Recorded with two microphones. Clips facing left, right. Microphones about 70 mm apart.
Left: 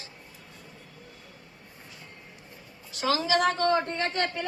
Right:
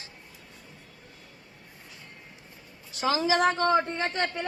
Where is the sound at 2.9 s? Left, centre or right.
Right.